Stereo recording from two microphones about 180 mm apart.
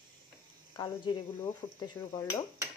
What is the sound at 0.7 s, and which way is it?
A woman's voice, 25° left (ahead or behind).